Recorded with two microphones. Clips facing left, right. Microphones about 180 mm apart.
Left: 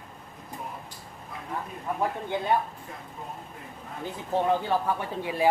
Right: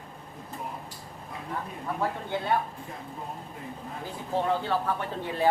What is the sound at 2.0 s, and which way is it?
Speech, 15° left (ahead or behind).